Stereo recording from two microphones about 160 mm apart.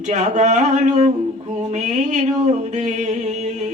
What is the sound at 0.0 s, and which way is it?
Speech, 45° right (ahead or behind).